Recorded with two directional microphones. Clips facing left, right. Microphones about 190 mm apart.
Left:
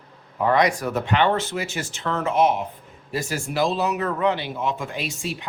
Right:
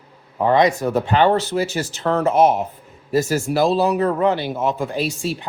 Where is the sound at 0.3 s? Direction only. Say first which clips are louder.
Right 4 dB; 25° right (ahead or behind).